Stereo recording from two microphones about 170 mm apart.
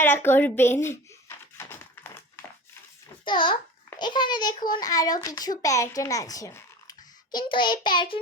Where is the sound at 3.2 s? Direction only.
30° left (ahead or behind).